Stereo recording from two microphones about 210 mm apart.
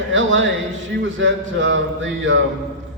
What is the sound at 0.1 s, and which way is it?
A man's voice, 60° right (ahead or behind).